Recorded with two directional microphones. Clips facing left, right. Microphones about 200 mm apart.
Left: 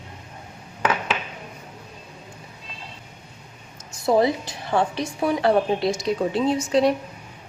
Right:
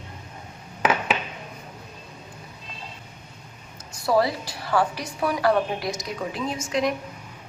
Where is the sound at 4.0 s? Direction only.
20° left (ahead or behind).